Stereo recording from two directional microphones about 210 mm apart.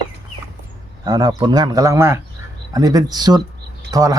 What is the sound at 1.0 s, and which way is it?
Speech, 20° right (ahead or behind).